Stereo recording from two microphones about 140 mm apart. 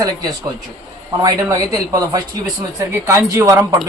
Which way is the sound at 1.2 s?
25° right (ahead or behind).